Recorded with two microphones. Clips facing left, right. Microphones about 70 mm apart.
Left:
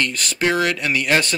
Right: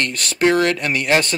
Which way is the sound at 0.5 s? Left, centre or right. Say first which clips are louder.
Right 2 dB; right.